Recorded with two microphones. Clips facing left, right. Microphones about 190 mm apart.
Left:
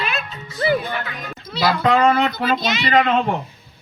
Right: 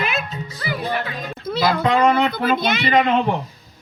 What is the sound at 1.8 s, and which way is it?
Speech, 20° right (ahead or behind).